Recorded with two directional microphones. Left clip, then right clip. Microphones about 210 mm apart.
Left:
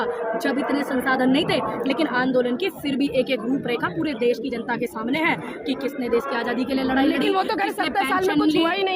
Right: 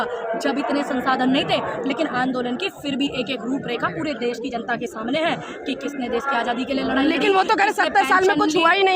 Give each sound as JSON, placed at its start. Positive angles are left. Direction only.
{"t": 0.4, "sound": "a woman's voice", "side_deg": -5}
{"t": 4.7, "sound": "a woman's voice", "side_deg": 0}
{"t": 7.3, "sound": "a woman's voice", "side_deg": -20}